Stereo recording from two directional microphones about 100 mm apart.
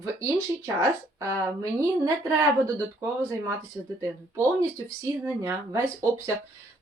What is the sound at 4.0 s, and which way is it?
Speech, 30° right (ahead or behind).